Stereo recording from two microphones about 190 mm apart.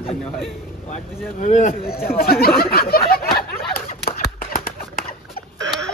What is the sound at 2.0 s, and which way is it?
Speech, 50° left (ahead or behind).